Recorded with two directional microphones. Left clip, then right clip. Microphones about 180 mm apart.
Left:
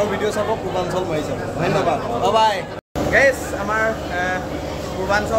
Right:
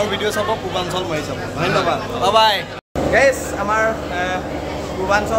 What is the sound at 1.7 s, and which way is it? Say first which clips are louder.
Speech: right 1 dB; centre (ahead or behind).